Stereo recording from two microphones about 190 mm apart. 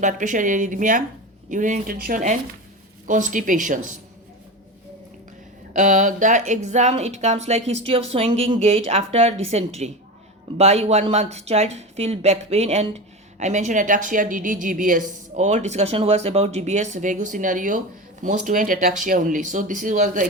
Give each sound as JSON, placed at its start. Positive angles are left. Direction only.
{"t": 0.0, "sound": "speech", "side_deg": -40}
{"t": 5.7, "sound": "a woman's voice", "side_deg": -40}